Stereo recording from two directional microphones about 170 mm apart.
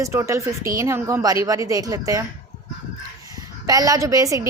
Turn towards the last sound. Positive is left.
turn(degrees=-20)  # may be behind; listen again after turning